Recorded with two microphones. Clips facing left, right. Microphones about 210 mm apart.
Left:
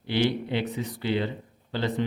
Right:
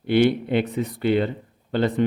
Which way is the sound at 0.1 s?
55° right (ahead or behind).